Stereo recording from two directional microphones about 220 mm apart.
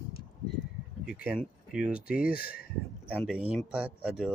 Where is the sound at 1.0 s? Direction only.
5° right (ahead or behind).